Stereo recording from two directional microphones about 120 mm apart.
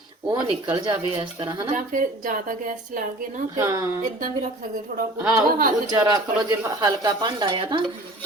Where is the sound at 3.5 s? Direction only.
25° right (ahead or behind).